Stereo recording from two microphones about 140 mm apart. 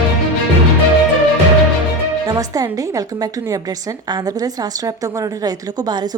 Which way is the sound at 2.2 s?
25° right (ahead or behind).